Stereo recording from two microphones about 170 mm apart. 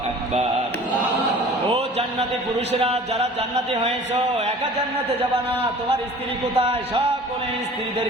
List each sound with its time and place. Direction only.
2.8 s speech: 35° right (ahead or behind)
6.6 s speech: 35° right (ahead or behind)